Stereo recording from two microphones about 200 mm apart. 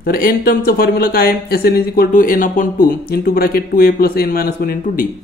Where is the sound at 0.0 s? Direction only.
45° left (ahead or behind).